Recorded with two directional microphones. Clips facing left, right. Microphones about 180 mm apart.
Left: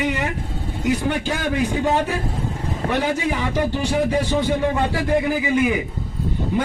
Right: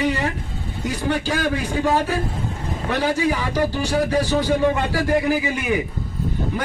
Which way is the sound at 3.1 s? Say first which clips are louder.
Right 1 dB; 25° left (ahead or behind).